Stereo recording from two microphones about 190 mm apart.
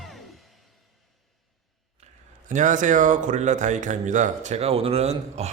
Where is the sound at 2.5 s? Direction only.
40° right (ahead or behind).